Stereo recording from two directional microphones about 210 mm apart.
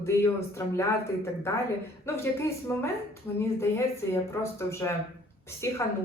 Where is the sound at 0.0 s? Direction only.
15° left (ahead or behind).